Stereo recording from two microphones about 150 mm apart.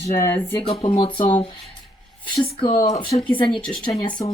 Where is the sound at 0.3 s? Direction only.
35° left (ahead or behind).